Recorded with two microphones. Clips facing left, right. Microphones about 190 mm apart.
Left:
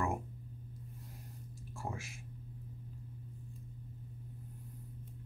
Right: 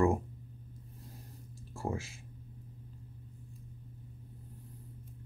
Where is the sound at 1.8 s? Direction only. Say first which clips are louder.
Right 7 dB; 30° right (ahead or behind).